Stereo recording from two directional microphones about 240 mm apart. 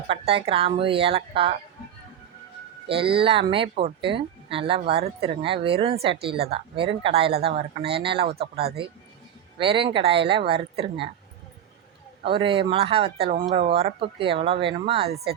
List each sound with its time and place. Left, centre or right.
0.1 s speech: right
2.9 s speech: right
6.1 s a woman's voice: right
6.5 s speech: right
8.2 s a woman's voice: right
9.6 s speech: right
12.2 s speech: right